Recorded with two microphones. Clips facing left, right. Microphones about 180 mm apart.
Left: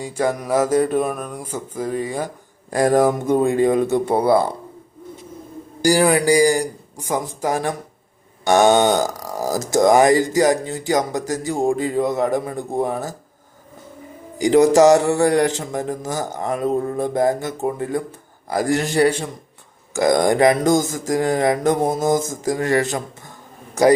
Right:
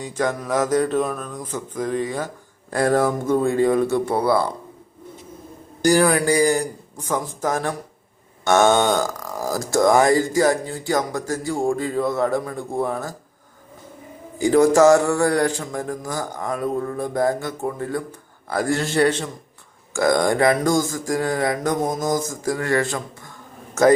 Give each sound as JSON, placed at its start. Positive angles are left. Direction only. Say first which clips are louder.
{"t": 0.0, "sound": "speech", "louder": "left 2 dB", "side_deg": 10}
{"t": 5.8, "sound": "speech", "louder": "left 1 dB", "side_deg": 15}
{"t": 14.3, "sound": "speech", "louder": "left 2 dB", "side_deg": 20}